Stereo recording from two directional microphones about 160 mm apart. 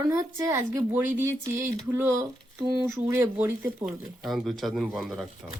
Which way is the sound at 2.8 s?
15° right (ahead or behind).